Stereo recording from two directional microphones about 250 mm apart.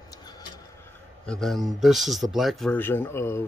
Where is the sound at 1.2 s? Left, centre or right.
Centre.